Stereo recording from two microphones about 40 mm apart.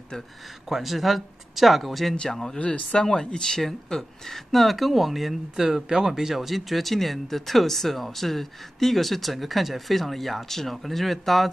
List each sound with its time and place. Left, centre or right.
0.7 s speech: centre
2.3 s speech: centre
2.6 s speech: left
3.4 s speech: centre